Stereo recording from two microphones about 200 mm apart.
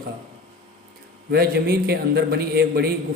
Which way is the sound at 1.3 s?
50° right (ahead or behind).